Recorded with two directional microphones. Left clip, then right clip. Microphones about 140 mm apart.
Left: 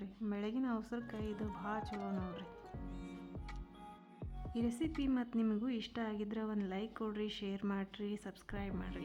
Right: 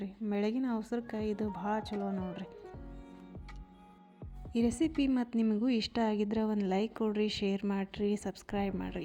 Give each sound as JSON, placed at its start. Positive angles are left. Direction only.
{"t": 0.0, "sound": "a woman's voice", "side_deg": -30}
{"t": 4.5, "sound": "a woman's voice", "side_deg": -35}